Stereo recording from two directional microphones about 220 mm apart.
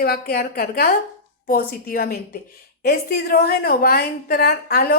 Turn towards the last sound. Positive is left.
turn(degrees=45)  # may be behind; listen again after turning